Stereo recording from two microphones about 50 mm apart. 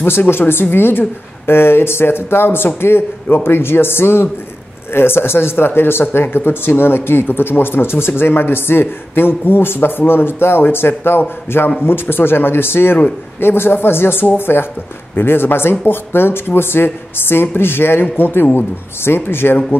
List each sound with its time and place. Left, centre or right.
0.3 s a man's voice: left